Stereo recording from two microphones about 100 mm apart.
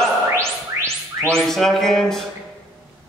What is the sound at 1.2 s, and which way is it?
A man's voice, 5° left (ahead or behind).